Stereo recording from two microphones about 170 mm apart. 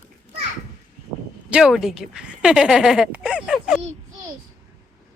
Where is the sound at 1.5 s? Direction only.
5° right (ahead or behind).